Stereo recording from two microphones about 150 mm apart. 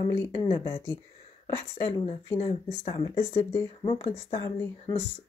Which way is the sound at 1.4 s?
45° left (ahead or behind).